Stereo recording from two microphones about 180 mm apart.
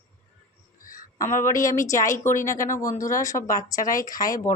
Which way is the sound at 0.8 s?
50° left (ahead or behind).